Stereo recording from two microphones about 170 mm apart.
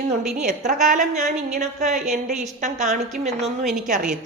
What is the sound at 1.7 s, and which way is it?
Speech, 40° right (ahead or behind).